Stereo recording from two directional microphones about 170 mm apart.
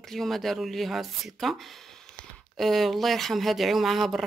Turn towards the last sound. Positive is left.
turn(degrees=0)  # may be behind; listen again after turning